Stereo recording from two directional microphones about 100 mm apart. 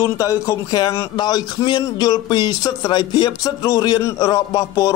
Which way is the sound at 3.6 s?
35° left (ahead or behind).